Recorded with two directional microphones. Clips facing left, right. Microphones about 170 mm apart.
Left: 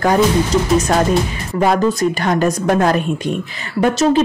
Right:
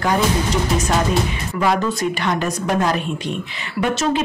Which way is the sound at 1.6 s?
45° left (ahead or behind).